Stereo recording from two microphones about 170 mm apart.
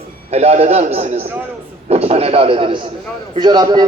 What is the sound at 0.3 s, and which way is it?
A man's voice, 40° right (ahead or behind).